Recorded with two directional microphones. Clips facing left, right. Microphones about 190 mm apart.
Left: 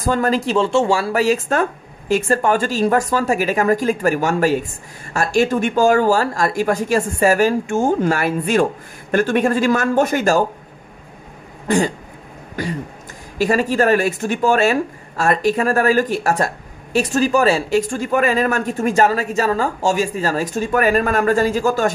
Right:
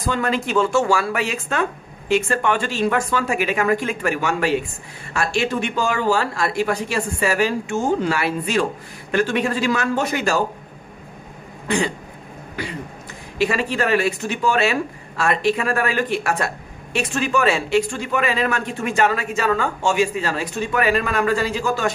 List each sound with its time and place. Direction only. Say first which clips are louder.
0.0 s speech: left 4 dB; 40° left (ahead or behind)
11.6 s throat clearing: left 4 dB; 45° left (ahead or behind)
12.6 s speech: left 5 dB; 45° left (ahead or behind)